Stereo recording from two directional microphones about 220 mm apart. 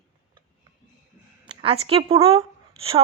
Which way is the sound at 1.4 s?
25° right (ahead or behind).